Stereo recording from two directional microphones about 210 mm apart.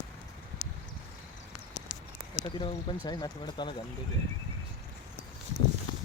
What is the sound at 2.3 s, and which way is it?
Speech, 20° left (ahead or behind).